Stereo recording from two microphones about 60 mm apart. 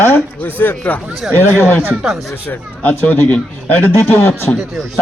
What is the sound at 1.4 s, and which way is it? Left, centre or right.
Speech, left.